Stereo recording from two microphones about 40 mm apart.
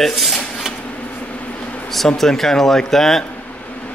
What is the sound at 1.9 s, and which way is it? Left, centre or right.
A man's voice, centre.